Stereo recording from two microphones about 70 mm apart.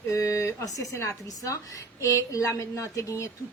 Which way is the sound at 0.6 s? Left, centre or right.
Left.